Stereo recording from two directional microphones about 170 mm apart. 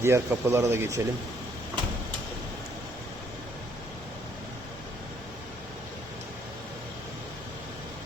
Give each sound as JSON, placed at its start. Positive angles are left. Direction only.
{"t": 0.0, "sound": "speech", "side_deg": -15}